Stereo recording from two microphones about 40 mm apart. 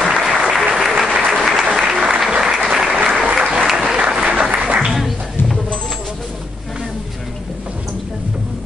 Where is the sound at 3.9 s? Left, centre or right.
Right.